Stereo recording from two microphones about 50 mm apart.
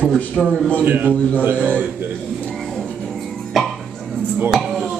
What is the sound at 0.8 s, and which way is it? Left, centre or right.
Speech, right.